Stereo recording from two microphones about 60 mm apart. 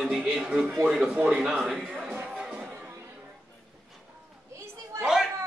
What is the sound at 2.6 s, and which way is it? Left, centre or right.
Music, right.